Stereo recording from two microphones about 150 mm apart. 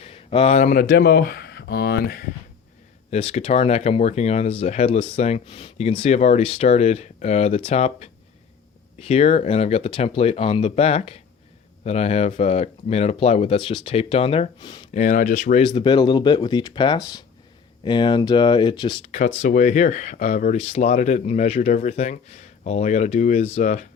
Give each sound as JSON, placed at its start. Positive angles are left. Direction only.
{"t": 0.0, "sound": "a sound", "side_deg": 40}
{"t": 0.7, "sound": "speech", "side_deg": 75}
{"t": 3.1, "sound": "speech", "side_deg": 45}
{"t": 15.0, "sound": "speech", "side_deg": 60}
{"t": 15.7, "sound": "speech", "side_deg": 30}
{"t": 19.1, "sound": "speech", "side_deg": 55}